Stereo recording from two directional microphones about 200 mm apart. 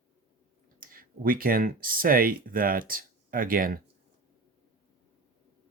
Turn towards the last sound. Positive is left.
turn(degrees=-45)  # may be behind; listen again after turning